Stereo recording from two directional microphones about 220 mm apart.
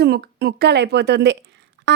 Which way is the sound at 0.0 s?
45° right (ahead or behind).